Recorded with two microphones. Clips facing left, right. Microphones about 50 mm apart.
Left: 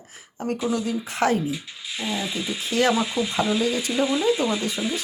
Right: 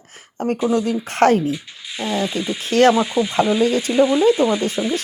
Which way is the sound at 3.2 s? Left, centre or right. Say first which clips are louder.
Right 6 dB; centre.